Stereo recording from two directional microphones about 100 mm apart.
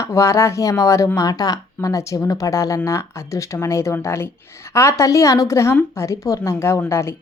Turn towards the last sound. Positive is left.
turn(degrees=25)  # may be behind; listen again after turning